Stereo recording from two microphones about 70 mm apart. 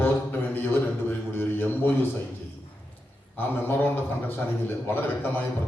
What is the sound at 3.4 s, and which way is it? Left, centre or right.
A man's voice, left.